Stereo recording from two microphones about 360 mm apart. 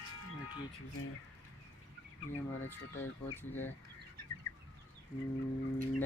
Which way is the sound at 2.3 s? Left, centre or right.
Left.